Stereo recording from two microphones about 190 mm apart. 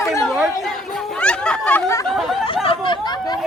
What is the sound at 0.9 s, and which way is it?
Chatter, 5° left (ahead or behind).